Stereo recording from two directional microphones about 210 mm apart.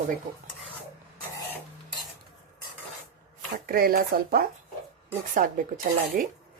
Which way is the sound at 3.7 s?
45° right (ahead or behind).